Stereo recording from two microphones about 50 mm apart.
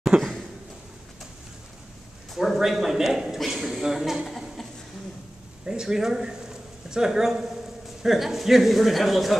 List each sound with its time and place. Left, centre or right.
0.1 s speech: centre
2.3 s a woman's voice: centre
4.3 s a sound: centre
5.7 s a man's voice: centre